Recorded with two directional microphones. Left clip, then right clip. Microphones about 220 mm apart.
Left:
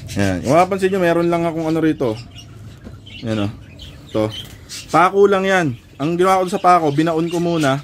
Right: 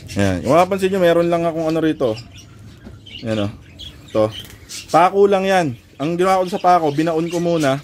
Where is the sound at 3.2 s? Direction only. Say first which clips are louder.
Right 1 dB; 5° right (ahead or behind).